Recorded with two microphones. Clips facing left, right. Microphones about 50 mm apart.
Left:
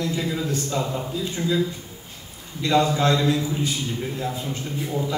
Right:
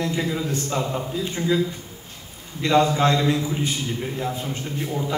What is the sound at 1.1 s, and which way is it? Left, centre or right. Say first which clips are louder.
Speech: right 3 dB; right.